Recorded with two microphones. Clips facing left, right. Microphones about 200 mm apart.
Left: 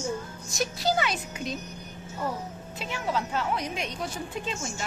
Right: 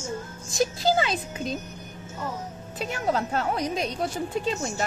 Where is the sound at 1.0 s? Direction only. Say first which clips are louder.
Right 3 dB; 30° right (ahead or behind).